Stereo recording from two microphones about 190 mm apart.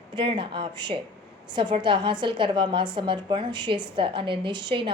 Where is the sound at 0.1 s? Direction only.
25° right (ahead or behind).